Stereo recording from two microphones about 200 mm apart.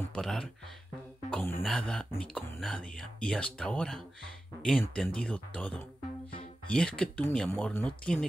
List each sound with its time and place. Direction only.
0.1 s speech: centre (ahead or behind)